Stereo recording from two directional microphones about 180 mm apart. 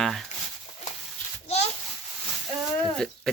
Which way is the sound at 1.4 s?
35° left (ahead or behind).